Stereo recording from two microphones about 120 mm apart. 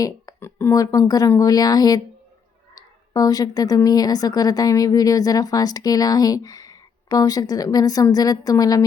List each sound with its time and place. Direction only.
0.3 s a sound: 20° left (ahead or behind)
0.7 s speech: 30° left (ahead or behind)
3.1 s speech: 30° left (ahead or behind)